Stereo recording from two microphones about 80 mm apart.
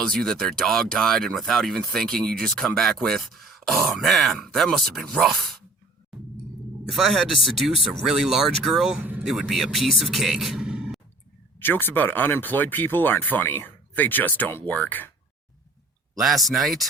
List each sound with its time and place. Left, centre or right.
0.0 s speech: centre
6.9 s speech: centre
9.0 s speech: centre
9.2 s speech: centre
11.6 s speech: left
16.2 s speech: centre